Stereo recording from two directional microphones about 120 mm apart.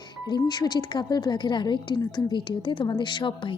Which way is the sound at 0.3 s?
35° left (ahead or behind).